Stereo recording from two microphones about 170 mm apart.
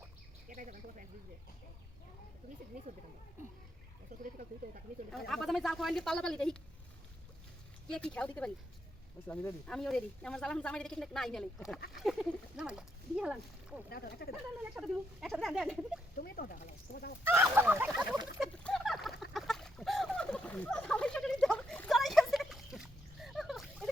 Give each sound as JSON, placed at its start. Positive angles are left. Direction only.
{"t": 0.4, "sound": "speech", "side_deg": -55}
{"t": 4.2, "sound": "speech", "side_deg": -50}
{"t": 5.1, "sound": "speech", "side_deg": 0}
{"t": 7.9, "sound": "speech", "side_deg": 5}
{"t": 13.9, "sound": "speech", "side_deg": 65}
{"t": 14.6, "sound": "speech", "side_deg": 0}
{"t": 16.1, "sound": "speech", "side_deg": 60}
{"t": 17.2, "sound": "speech", "side_deg": -15}
{"t": 18.6, "sound": "duck", "side_deg": 0}
{"t": 19.3, "sound": "a sound", "side_deg": 0}